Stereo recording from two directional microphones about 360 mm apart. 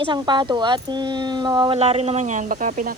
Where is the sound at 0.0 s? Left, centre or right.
Centre.